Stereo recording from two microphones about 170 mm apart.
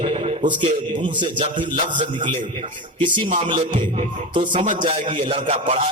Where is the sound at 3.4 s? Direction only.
30° right (ahead or behind).